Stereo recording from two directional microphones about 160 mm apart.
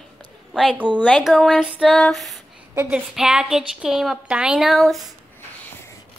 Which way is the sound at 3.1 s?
5° right (ahead or behind).